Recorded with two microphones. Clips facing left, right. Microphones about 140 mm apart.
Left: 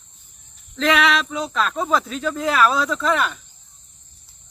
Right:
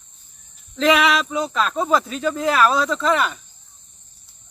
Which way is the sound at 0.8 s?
5° right (ahead or behind).